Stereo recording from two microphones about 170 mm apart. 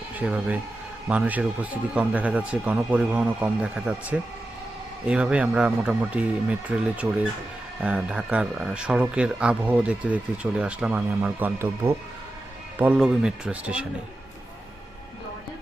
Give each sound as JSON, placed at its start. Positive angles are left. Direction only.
{"t": 0.2, "sound": "speech", "side_deg": -10}